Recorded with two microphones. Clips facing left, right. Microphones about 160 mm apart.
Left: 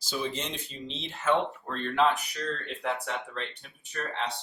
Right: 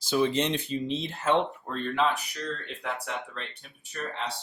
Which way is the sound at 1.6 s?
5° right (ahead or behind).